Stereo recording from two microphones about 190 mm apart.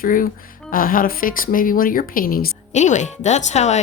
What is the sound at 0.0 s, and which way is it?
A woman's voice, 45° left (ahead or behind).